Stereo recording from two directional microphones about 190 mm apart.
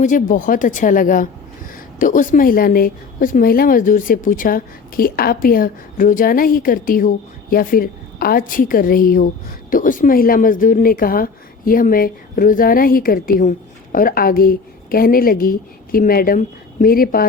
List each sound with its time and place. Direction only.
0.0 s a woman's voice: 45° left (ahead or behind)